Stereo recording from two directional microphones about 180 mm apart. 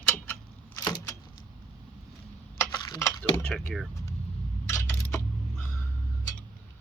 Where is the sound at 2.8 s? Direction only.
20° left (ahead or behind).